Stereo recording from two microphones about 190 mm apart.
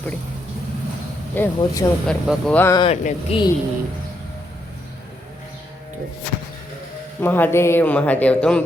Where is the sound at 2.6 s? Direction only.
15° left (ahead or behind).